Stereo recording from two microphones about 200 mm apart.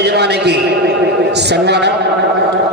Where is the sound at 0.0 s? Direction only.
55° right (ahead or behind).